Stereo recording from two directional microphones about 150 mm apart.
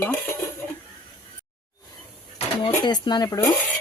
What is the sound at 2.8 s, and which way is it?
Speech, 30° left (ahead or behind).